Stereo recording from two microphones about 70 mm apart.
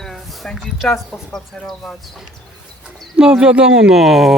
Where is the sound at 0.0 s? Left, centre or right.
Centre.